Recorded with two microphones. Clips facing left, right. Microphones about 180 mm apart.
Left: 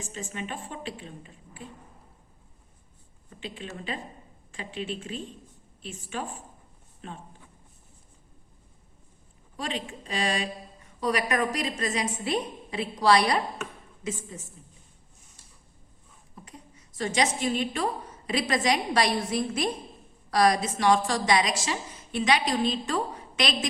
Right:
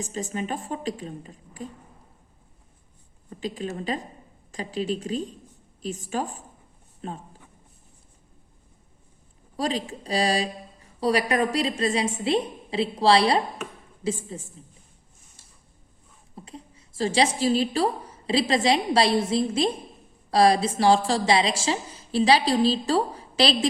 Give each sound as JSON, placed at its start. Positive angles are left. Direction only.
{"t": 0.0, "sound": "a woman's voice", "side_deg": -40}
{"t": 3.2, "sound": "a woman's voice", "side_deg": -40}
{"t": 9.6, "sound": "a woman's voice", "side_deg": -35}
{"t": 16.3, "sound": "a woman's voice", "side_deg": -30}